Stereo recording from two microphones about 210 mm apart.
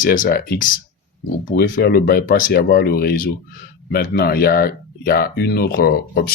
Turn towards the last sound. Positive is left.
turn(degrees=50)  # may be behind; listen again after turning